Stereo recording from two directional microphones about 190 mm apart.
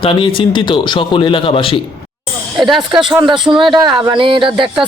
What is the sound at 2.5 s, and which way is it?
Speech, centre (ahead or behind).